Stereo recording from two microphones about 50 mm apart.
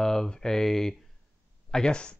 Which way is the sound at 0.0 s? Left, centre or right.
Centre.